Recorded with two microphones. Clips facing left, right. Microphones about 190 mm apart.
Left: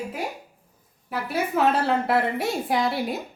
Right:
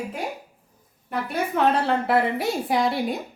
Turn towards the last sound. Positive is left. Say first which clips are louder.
# right 1 dB
turn(degrees=0)  # may be behind; listen again after turning